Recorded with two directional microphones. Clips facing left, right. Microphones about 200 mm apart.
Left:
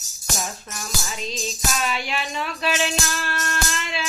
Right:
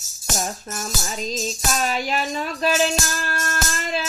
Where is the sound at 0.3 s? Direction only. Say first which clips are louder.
Right 5 dB; 40° right (ahead or behind).